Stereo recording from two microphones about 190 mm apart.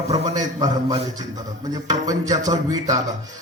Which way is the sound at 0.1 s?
20° right (ahead or behind).